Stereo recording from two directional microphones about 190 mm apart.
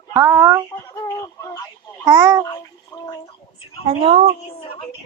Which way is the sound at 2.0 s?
20° right (ahead or behind).